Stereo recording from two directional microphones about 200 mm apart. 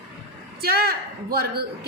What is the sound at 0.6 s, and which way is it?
Speech, 50° right (ahead or behind).